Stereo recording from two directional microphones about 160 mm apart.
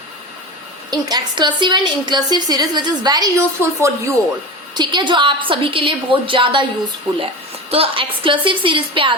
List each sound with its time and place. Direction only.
0.9 s a woman's voice: 25° right (ahead or behind)
7.7 s a woman's voice: 35° right (ahead or behind)